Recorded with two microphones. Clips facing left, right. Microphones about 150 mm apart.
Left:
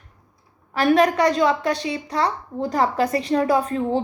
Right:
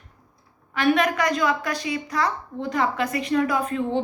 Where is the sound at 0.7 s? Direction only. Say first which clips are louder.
Left 4 dB; 35° left (ahead or behind).